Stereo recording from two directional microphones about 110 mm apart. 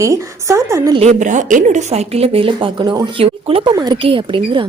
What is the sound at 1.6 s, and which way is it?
Speech, 85° right.